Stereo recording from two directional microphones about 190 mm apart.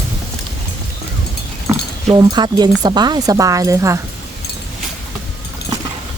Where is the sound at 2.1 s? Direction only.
20° right (ahead or behind).